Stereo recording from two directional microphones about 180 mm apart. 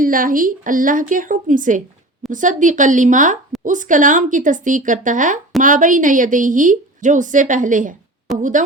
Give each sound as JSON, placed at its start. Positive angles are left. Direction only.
{"t": 0.0, "sound": "a woman's voice", "side_deg": -50}